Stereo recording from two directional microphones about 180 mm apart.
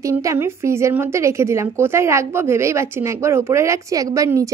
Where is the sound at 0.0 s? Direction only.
15° right (ahead or behind).